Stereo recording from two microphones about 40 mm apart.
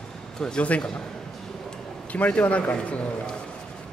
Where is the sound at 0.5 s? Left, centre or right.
Left.